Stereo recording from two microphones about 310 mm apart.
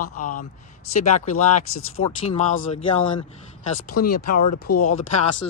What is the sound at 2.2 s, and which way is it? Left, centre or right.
Speech, left.